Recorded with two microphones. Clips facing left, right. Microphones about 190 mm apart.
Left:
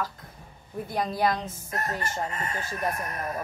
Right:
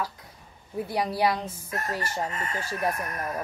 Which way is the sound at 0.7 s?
10° right (ahead or behind).